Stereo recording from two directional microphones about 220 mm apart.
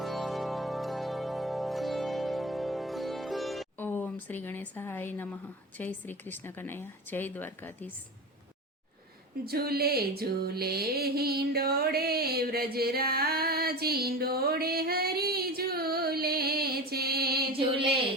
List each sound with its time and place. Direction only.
0.0 s music: centre (ahead or behind)
9.5 s music: 45° right (ahead or behind)